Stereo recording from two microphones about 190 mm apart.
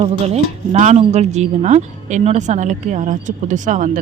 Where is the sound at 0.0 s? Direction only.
35° right (ahead or behind).